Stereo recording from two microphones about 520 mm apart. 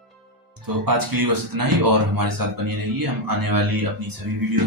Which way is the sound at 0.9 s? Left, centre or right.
Right.